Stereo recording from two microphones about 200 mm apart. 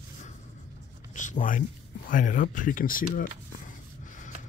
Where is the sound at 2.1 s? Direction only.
40° left (ahead or behind).